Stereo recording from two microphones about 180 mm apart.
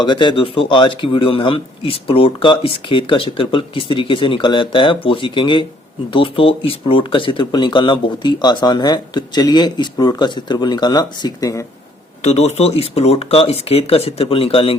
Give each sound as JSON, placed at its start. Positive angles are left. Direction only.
{"t": 0.0, "sound": "speech", "side_deg": 25}
{"t": 12.2, "sound": "speech", "side_deg": 40}